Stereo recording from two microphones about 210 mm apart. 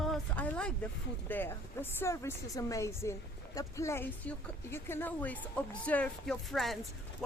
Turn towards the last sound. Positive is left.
turn(degrees=0)  # may be behind; listen again after turning